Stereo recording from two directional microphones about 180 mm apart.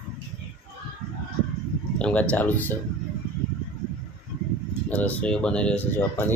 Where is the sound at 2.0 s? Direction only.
5° left (ahead or behind).